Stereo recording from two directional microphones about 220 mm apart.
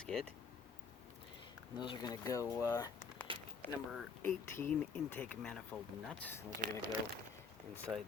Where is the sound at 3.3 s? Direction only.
25° right (ahead or behind).